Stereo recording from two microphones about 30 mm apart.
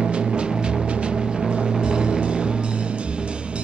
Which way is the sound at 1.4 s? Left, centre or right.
Right.